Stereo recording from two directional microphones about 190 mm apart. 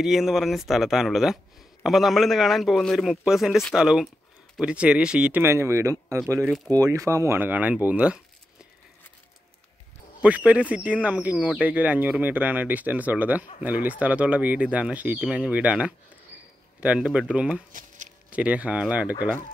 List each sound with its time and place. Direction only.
0.0 s speech: centre (ahead or behind)
10.2 s speech: 5° right (ahead or behind)
17.7 s a sound: 40° right (ahead or behind)
18.3 s speech: 5° right (ahead or behind)